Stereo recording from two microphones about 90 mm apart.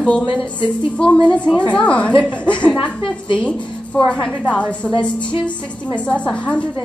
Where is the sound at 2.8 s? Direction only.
70° left (ahead or behind).